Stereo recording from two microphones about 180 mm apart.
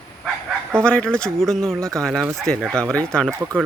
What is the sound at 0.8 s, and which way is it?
Speech, 5° left (ahead or behind).